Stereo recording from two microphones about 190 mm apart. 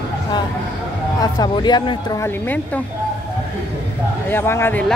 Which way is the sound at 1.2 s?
20° left (ahead or behind).